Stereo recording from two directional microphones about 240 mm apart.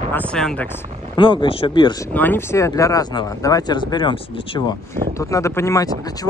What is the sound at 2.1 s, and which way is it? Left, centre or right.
Speech, centre.